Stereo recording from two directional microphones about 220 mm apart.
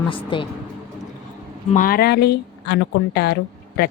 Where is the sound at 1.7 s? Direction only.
40° left (ahead or behind).